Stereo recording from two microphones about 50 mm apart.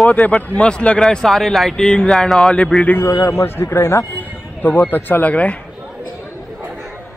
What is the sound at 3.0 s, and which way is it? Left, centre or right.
A man's voice, left.